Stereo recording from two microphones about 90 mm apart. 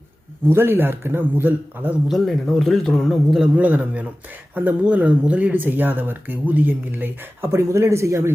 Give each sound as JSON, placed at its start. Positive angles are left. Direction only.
{"t": 0.4, "sound": "speech", "side_deg": -25}
{"t": 2.0, "sound": "speech", "side_deg": 0}
{"t": 3.5, "sound": "a man's voice", "side_deg": -15}